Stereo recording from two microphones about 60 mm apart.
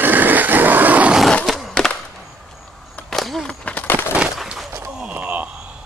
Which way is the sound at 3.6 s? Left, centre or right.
Left.